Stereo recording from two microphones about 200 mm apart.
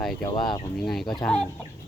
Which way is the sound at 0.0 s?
Centre (ahead or behind).